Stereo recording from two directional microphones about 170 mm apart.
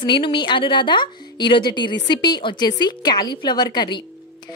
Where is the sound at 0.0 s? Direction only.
30° left (ahead or behind).